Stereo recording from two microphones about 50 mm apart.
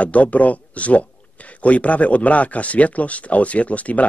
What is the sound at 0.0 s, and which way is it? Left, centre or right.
Speech, left.